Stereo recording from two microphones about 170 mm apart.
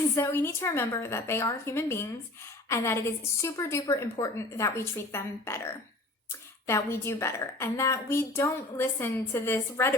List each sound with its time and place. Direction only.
0.1 s a woman's voice: 15° left (ahead or behind)